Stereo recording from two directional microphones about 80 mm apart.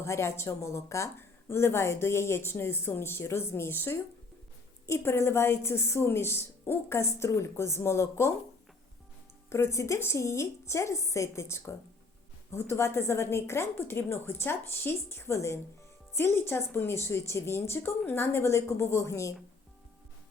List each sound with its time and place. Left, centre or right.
0.0 s a woman's voice: left
9.5 s a woman's voice: left